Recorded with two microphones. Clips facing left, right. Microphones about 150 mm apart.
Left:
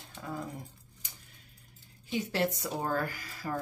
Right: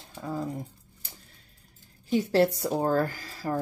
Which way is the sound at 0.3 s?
30° right (ahead or behind).